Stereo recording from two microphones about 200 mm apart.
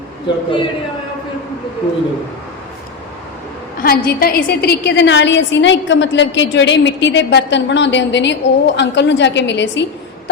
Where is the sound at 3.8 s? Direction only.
45° left (ahead or behind).